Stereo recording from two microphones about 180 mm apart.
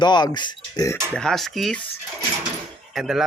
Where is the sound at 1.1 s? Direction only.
5° left (ahead or behind).